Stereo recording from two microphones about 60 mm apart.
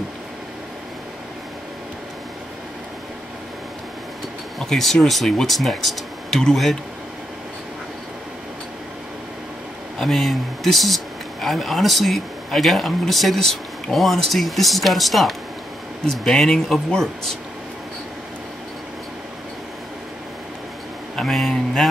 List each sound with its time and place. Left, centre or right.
4.6 s speech: centre
9.9 s speech: centre
21.2 s speech: centre